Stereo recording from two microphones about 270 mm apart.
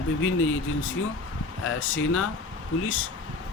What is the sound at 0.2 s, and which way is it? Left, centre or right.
Speech, left.